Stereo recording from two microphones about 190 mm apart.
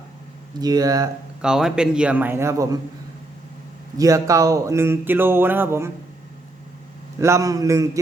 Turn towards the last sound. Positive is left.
turn(degrees=-15)  # may be behind; listen again after turning